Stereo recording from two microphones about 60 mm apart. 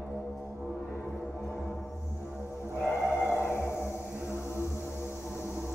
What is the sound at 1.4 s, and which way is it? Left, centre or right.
Foghorn, centre.